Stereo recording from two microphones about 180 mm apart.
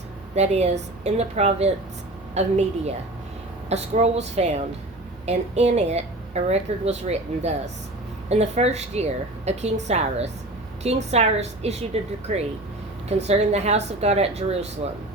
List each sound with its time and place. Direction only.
0.3 s a woman's voice: 40° right (ahead or behind)